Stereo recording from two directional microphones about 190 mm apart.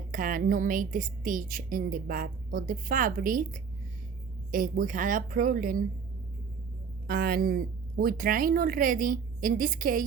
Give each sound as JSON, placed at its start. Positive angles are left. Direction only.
{"t": 0.1, "sound": "a woman's voice", "side_deg": -45}
{"t": 7.1, "sound": "a woman's voice", "side_deg": -50}